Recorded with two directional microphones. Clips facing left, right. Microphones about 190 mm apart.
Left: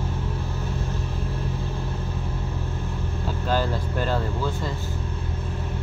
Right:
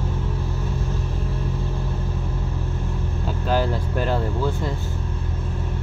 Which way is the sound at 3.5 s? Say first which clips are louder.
Right 3 dB; 15° right (ahead or behind).